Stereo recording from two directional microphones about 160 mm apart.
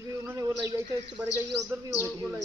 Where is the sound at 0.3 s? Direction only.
20° right (ahead or behind).